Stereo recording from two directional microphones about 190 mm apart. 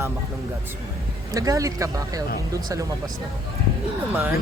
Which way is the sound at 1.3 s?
15° right (ahead or behind).